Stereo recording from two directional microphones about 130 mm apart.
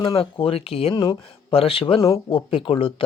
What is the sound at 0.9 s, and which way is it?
Speech, 35° left (ahead or behind).